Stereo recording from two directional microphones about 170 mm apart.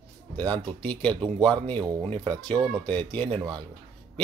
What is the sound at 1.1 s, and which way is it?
Speech, 25° right (ahead or behind).